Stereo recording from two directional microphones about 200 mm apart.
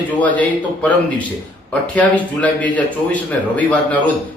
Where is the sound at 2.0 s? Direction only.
5° left (ahead or behind).